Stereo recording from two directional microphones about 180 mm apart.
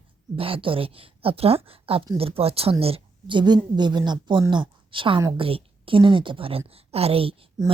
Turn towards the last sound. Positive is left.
turn(degrees=-25)  # may be behind; listen again after turning